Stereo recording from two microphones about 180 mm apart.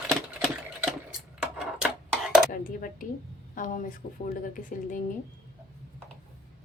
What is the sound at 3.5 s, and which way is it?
Speech, 50° left (ahead or behind).